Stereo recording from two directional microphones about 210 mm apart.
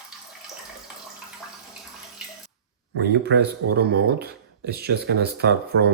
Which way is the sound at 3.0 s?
55° right (ahead or behind).